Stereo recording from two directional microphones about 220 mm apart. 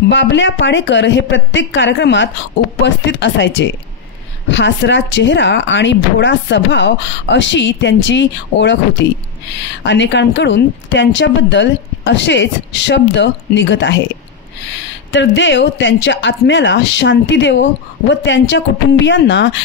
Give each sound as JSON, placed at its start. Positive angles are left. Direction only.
{"t": 0.1, "sound": "speech", "side_deg": 55}
{"t": 9.8, "sound": "speech", "side_deg": 55}
{"t": 15.1, "sound": "speech", "side_deg": 55}